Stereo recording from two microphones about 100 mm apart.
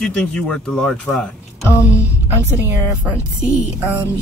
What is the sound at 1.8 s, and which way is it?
Music, 30° left (ahead or behind).